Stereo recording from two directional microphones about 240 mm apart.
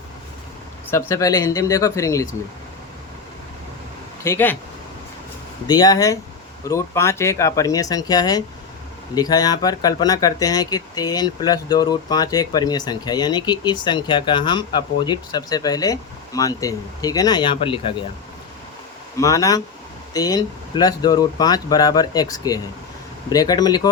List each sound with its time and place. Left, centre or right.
0.9 s speech: centre
4.2 s speech: centre
5.6 s speech: centre
19.2 s speech: centre